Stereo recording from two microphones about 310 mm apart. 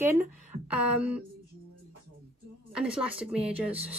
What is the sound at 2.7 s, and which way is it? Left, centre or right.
A woman's voice, centre.